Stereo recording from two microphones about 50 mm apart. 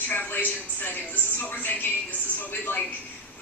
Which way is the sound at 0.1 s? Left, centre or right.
Left.